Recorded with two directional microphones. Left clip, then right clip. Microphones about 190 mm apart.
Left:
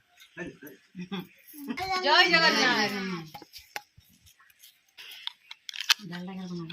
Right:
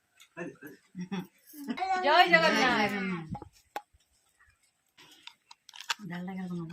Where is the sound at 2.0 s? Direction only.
25° right (ahead or behind).